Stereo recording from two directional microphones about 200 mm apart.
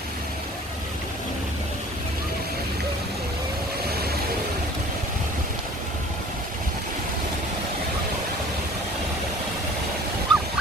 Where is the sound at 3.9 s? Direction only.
50° right (ahead or behind).